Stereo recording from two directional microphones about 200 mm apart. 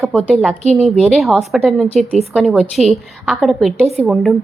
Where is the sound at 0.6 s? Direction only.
35° right (ahead or behind).